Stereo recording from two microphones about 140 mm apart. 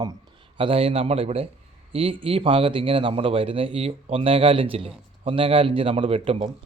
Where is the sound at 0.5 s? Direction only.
40° right (ahead or behind).